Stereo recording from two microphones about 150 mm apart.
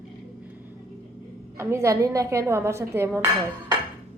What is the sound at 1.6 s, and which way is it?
Speech, 15° right (ahead or behind).